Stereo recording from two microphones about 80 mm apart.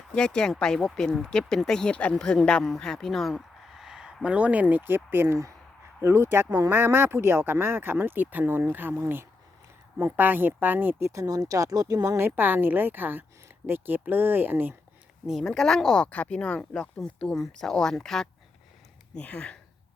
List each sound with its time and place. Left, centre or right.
0.1 s speech: centre; by 9.0 s right
10.0 s speech: right
11.1 s speech: right
12.1 s speech: right
15.3 s speech: centre
19.1 s speech: centre